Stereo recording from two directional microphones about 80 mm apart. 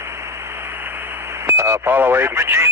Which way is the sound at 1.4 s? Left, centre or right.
Right.